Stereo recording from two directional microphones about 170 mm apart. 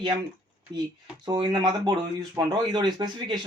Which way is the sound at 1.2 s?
25° right (ahead or behind).